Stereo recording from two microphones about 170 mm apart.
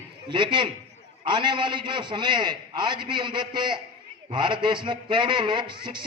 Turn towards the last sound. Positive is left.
turn(degrees=-25)  # may be behind; listen again after turning